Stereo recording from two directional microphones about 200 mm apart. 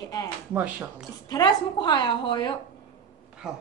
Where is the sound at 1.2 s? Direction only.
20° left (ahead or behind).